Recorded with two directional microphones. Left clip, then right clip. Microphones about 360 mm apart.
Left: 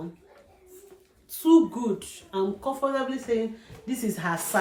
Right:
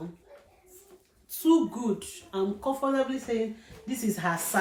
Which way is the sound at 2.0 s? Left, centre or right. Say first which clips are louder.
Left 2 dB; centre.